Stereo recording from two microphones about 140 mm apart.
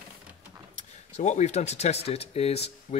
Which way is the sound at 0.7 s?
60° left (ahead or behind).